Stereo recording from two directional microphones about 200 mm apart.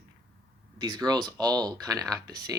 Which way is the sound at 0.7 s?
20° right (ahead or behind).